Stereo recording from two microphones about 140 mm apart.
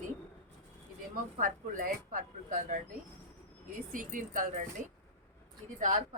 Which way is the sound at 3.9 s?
70° right (ahead or behind).